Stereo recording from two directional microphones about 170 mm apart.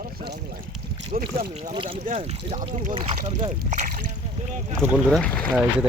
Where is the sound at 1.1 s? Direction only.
40° right (ahead or behind).